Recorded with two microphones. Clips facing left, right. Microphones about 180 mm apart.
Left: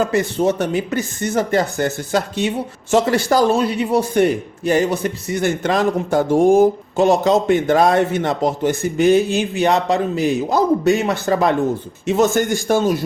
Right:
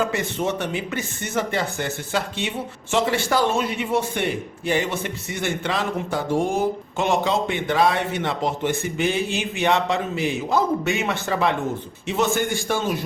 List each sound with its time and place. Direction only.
0.0 s a man's voice: 35° left (ahead or behind)